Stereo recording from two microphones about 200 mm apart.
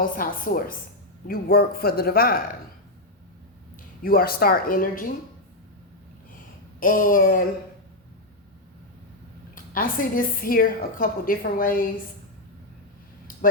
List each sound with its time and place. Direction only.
0.0 s a woman's voice: 45° left (ahead or behind)
4.0 s a woman's voice: 50° left (ahead or behind)
6.7 s a woman's voice: 45° left (ahead or behind)
9.7 s a woman's voice: 45° left (ahead or behind)